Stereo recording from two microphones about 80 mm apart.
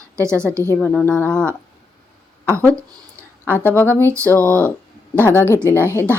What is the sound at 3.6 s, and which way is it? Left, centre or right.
Speech, left.